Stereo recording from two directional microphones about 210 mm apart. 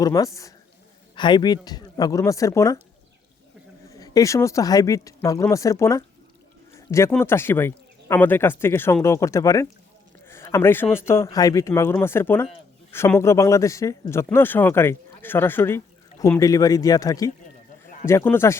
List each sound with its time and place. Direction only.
0.0 s a man's voice: 15° left (ahead or behind)
3.8 s a man's voice: 15° left (ahead or behind)